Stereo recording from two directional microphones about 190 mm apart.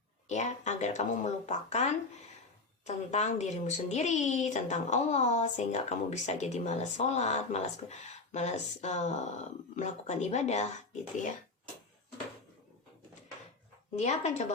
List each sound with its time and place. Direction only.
0.3 s a woman's voice: 40° left (ahead or behind)
13.9 s a woman's voice: 35° left (ahead or behind)